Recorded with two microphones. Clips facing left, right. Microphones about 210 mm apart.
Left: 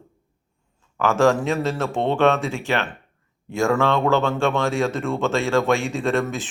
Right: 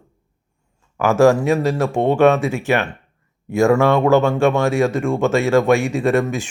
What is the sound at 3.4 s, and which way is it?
Speech, 10° right (ahead or behind).